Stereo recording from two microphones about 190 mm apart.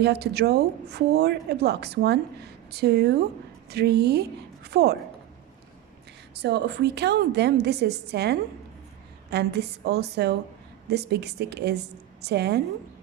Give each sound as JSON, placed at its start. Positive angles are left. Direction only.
{"t": 0.0, "sound": "a woman's voice", "side_deg": -60}
{"t": 6.3, "sound": "a woman's voice", "side_deg": -60}